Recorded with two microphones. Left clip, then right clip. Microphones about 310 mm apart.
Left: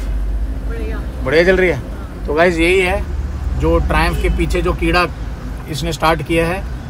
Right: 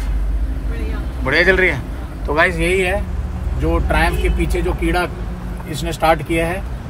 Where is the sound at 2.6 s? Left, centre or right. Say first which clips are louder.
Left 4 dB; left.